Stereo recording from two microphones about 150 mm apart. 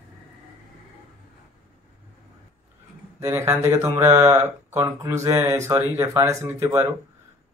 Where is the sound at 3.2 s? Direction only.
20° right (ahead or behind).